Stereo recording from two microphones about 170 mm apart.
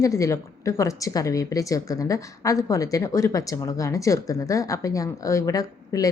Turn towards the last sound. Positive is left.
turn(degrees=20)  # may be behind; listen again after turning